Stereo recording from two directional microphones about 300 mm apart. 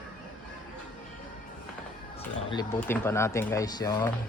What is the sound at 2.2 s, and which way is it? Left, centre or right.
Speech, centre.